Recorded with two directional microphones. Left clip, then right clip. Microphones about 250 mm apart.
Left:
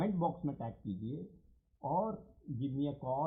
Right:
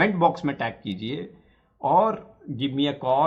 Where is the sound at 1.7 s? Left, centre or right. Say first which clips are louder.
Right 16 dB; right.